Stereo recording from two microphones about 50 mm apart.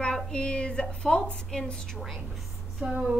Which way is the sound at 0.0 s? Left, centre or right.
Centre.